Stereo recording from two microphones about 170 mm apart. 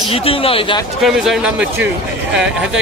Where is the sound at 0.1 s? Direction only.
35° left (ahead or behind).